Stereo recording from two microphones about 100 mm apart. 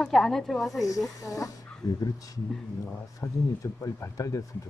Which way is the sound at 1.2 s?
35° left (ahead or behind).